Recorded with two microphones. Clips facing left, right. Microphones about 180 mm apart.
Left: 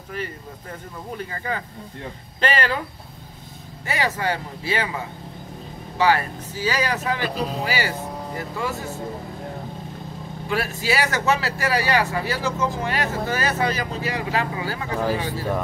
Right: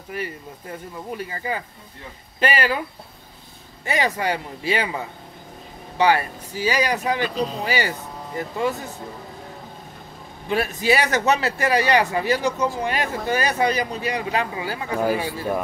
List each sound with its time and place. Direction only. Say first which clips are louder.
0.1 s speech: right 1 dB; 10° right (ahead or behind)
3.8 s speech: right 2 dB; 15° right (ahead or behind)
5.9 s speech: right 1 dB; 15° right (ahead or behind)
10.5 s speech: right 3 dB; 20° right (ahead or behind)